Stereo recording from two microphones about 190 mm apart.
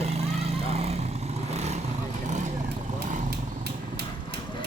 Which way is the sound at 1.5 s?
35° right (ahead or behind).